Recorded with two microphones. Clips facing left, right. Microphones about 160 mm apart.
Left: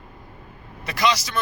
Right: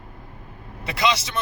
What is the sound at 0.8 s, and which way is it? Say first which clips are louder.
Speech: left 1 dB; 25° right (ahead or behind).